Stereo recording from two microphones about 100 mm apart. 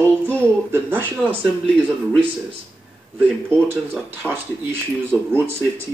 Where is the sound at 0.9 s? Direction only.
20° left (ahead or behind).